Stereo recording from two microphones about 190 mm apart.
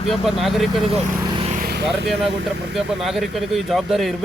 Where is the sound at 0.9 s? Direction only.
30° right (ahead or behind).